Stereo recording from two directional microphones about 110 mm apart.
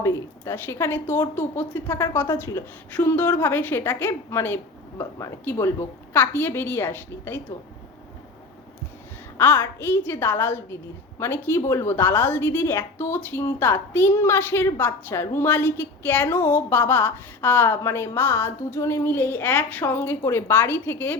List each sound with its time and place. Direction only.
0.0 s a woman's voice: 20° left (ahead or behind)
9.4 s a woman's voice: 20° left (ahead or behind)